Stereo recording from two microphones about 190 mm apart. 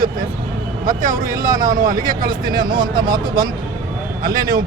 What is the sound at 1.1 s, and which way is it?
Speech, 15° right (ahead or behind).